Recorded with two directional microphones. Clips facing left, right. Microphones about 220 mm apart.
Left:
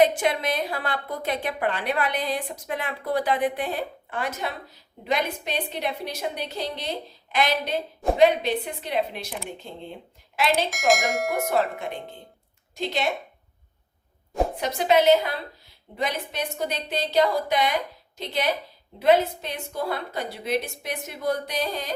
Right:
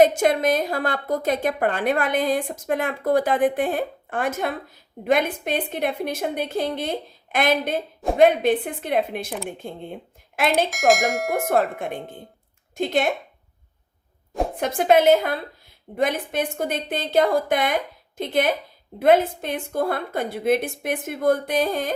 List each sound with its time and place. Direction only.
0.0 s a woman's voice: 45° right (ahead or behind)
10.7 s speech: centre (ahead or behind)
11.4 s a woman's voice: 50° right (ahead or behind)
14.6 s a woman's voice: 50° right (ahead or behind)